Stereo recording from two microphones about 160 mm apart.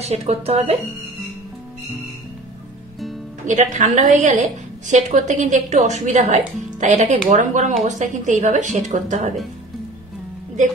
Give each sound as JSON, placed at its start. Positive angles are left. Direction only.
{"t": 0.0, "sound": "a woman's voice", "side_deg": -40}
{"t": 3.4, "sound": "a woman's voice", "side_deg": -50}